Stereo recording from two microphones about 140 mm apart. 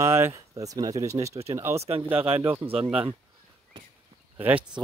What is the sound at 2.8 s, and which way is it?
Speech, 10° right (ahead or behind).